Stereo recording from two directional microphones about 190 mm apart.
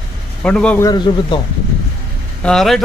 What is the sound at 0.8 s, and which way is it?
Speech, 25° left (ahead or behind).